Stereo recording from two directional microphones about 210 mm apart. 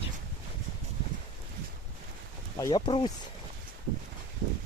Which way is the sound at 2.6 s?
20° left (ahead or behind).